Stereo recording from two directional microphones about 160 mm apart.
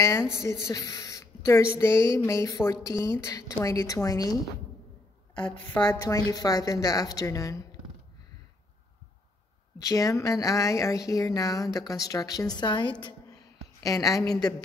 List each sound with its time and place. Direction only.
0.3 s a woman's voice: 15° left (ahead or behind)
5.9 s a woman's voice: 20° left (ahead or behind)
9.8 s a woman's voice: 20° left (ahead or behind)